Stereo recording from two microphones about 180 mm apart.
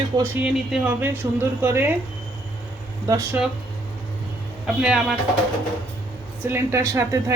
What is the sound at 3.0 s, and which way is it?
Speech, 15° right (ahead or behind).